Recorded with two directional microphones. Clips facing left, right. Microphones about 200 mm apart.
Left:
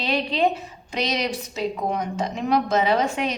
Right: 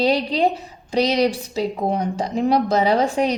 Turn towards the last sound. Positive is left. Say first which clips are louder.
# right 4 dB
turn(degrees=-35)  # may be behind; listen again after turning